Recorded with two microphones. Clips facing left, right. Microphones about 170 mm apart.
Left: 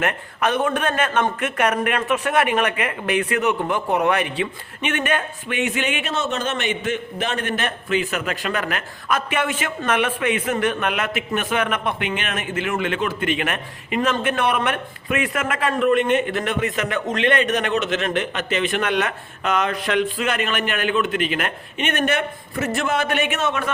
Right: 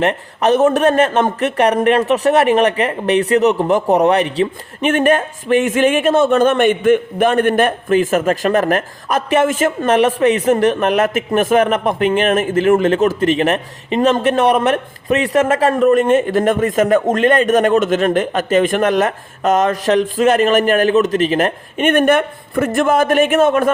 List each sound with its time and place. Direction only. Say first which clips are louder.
0.0 s a man's voice: right 7 dB; 35° right (ahead or behind)